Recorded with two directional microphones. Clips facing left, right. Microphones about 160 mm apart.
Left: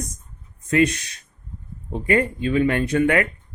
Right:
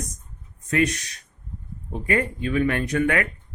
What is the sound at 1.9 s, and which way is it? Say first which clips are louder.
Speech: left 4 dB; 30° left (ahead or behind).